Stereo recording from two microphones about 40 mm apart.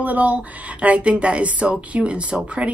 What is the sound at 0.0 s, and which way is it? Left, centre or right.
Speech, right.